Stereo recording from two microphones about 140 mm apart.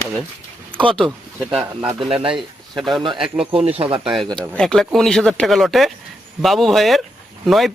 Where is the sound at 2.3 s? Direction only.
Centre (ahead or behind).